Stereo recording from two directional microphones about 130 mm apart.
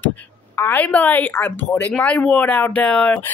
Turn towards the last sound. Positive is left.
turn(degrees=10)  # may be behind; listen again after turning